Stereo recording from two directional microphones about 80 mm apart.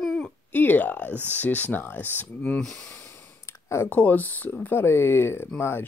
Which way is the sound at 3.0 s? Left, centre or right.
Left.